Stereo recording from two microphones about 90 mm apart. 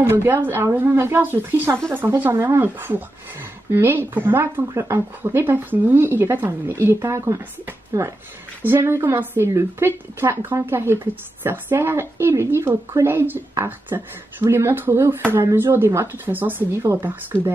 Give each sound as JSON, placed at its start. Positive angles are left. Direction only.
{"t": 0.0, "sound": "a woman's voice", "side_deg": -25}
{"t": 8.6, "sound": "a woman's voice", "side_deg": -25}